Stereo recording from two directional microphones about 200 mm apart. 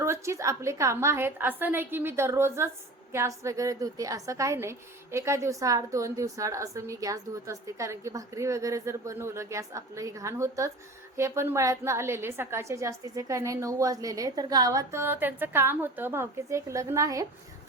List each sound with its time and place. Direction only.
0.0 s a woman's voice: 15° right (ahead or behind)